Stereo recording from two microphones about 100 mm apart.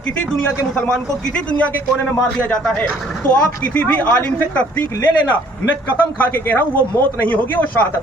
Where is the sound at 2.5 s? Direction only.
5° left (ahead or behind).